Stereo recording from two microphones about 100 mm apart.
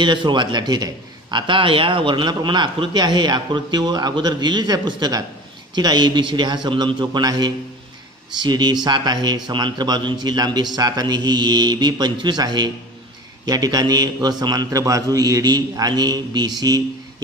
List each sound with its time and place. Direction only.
0.0 s a man's voice: 50° right (ahead or behind)